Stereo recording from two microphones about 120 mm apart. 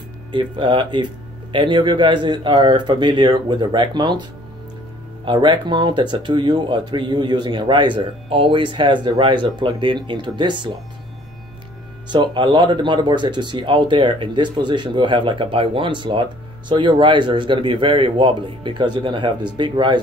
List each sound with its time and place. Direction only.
0.3 s speech: 45° right (ahead or behind)
12.1 s speech: 40° right (ahead or behind)